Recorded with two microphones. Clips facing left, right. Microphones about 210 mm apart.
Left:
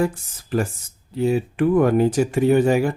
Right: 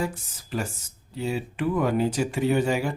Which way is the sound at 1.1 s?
55° left (ahead or behind).